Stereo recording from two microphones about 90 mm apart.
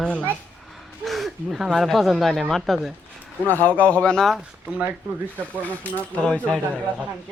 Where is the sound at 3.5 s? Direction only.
20° left (ahead or behind).